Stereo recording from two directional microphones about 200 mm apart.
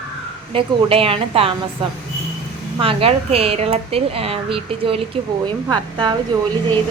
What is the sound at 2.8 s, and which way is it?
Speech, 25° right (ahead or behind).